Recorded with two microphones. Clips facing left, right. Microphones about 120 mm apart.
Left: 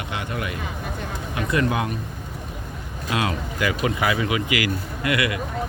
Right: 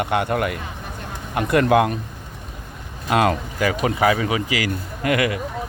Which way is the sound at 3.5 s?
35° right (ahead or behind).